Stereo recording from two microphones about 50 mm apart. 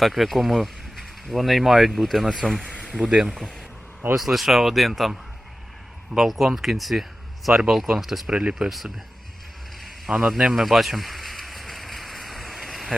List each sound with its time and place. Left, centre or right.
0.0 s speech: centre
2.6 s a sound: left
2.9 s speech: centre
3.2 s speech: centre
8.3 s speech: centre
10.1 s a sound: centre